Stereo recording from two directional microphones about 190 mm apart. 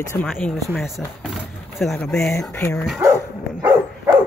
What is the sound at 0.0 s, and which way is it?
Speech, 15° left (ahead or behind).